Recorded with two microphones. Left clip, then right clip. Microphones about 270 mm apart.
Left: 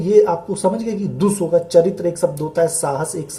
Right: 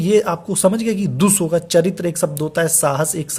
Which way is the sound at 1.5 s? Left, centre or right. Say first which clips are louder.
Left 4 dB; right.